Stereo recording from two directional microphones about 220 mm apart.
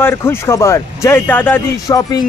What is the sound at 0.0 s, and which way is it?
Speech, 10° left (ahead or behind).